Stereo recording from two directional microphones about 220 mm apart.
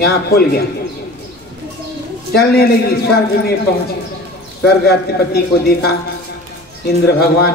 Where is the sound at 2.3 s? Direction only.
45° left (ahead or behind).